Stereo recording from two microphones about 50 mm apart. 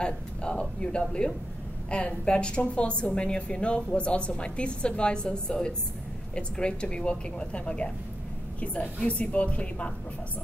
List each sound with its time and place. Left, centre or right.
0.0 s a woman's voice: centre